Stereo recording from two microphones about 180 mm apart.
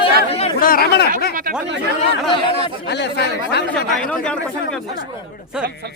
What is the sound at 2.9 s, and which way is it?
Speech, 70° left (ahead or behind).